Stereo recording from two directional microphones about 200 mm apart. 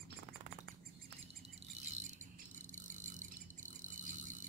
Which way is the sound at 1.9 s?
35° right (ahead or behind).